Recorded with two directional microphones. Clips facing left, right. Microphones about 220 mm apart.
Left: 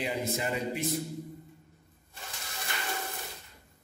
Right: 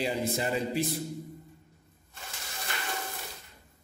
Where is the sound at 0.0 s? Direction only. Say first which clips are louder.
Right 2 dB; 35° right (ahead or behind).